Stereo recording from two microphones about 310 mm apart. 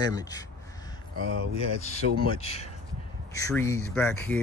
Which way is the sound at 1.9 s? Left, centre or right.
Centre.